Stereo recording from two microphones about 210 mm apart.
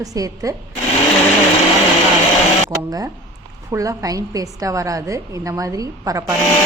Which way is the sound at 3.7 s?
15° right (ahead or behind).